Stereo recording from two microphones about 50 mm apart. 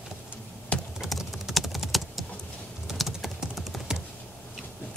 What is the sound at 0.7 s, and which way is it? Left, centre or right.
Typing, left.